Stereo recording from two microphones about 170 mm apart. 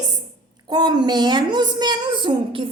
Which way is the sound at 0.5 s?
25° right (ahead or behind).